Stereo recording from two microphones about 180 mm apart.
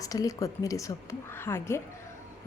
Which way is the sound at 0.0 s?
20° left (ahead or behind).